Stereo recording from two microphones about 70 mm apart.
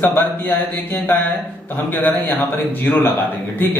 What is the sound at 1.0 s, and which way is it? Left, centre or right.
A man's voice, left.